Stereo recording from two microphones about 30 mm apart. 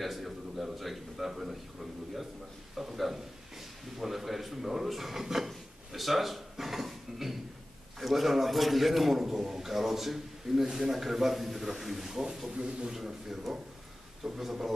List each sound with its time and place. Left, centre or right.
0.0 s speech: centre
2.7 s a sound: centre
4.0 s drawer open or close: centre
8.0 s a man's voice: centre
12.4 s speech: right
12.9 s a man's voice: centre